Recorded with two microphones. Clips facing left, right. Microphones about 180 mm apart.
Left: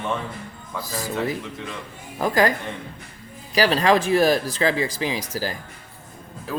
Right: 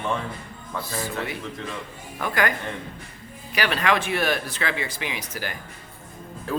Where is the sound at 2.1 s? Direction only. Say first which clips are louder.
Left 5 dB; 35° left (ahead or behind).